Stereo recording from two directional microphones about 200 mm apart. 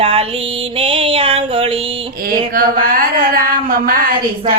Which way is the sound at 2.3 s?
45° right (ahead or behind).